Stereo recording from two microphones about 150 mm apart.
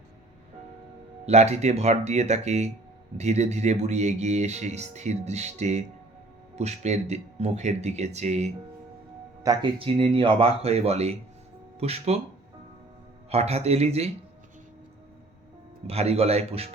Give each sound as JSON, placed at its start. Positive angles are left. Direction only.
{"t": 1.2, "sound": "speech", "side_deg": -45}
{"t": 9.4, "sound": "speech", "side_deg": -25}
{"t": 9.7, "sound": "speech", "side_deg": -40}
{"t": 13.3, "sound": "speech", "side_deg": -45}
{"t": 15.9, "sound": "speech", "side_deg": -45}